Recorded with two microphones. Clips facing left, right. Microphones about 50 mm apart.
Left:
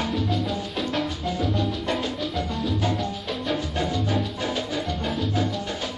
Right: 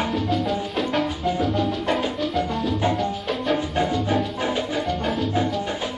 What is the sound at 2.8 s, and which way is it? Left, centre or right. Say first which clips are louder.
Music: right 4 dB; centre.